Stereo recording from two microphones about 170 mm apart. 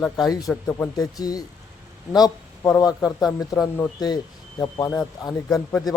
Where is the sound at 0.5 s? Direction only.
10° left (ahead or behind).